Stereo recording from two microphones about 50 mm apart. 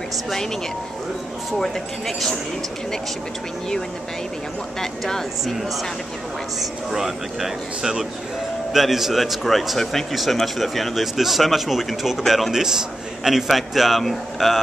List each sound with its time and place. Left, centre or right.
1.6 s speech: centre
4.7 s speech: centre
5.4 s speech: centre
6.9 s speech: centre